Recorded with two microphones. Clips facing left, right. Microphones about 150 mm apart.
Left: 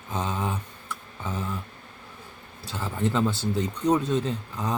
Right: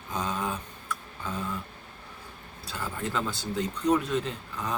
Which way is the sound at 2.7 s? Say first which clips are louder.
Left 5 dB; 25° left (ahead or behind).